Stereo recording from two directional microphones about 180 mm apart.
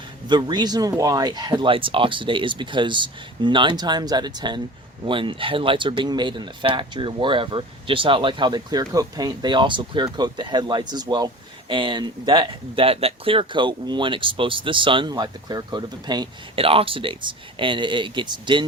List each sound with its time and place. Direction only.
0.3 s speech: 25° right (ahead or behind)